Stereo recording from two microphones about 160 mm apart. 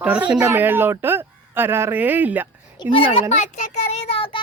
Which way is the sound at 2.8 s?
35° left (ahead or behind).